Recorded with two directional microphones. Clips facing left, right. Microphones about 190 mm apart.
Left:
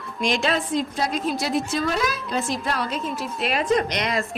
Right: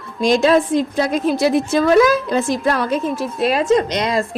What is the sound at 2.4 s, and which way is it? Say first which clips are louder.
A woman's voice: right 8 dB; 50° right (ahead or behind).